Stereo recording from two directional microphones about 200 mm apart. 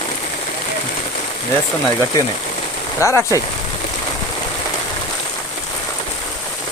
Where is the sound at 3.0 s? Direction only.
15° left (ahead or behind).